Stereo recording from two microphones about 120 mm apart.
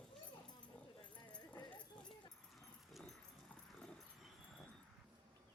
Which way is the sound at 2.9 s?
5° left (ahead or behind).